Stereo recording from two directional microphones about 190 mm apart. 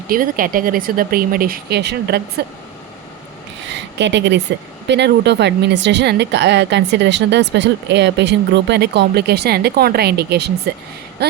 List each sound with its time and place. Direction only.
0.1 s speech: 50° right (ahead or behind)
3.9 s speech: 65° right (ahead or behind)